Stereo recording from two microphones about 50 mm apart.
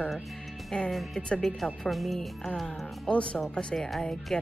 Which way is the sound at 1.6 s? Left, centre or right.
Centre.